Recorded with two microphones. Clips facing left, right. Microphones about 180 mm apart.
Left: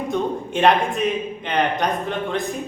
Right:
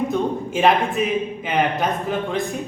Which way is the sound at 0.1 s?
Centre (ahead or behind).